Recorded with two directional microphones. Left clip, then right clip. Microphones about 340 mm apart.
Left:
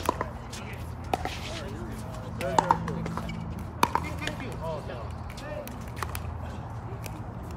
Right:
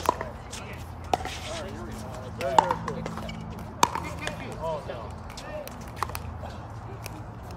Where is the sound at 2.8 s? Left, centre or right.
Right.